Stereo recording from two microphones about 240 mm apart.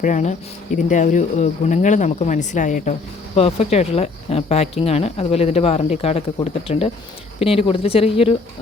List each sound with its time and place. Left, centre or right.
0.0 s speech: left